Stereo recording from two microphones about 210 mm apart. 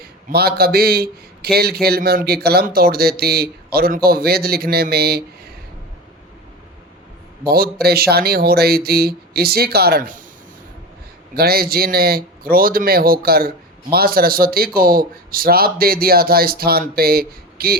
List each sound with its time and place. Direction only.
0.0 s a man's voice: 45° right (ahead or behind)
7.4 s a man's voice: 45° right (ahead or behind)
11.3 s a man's voice: 45° right (ahead or behind)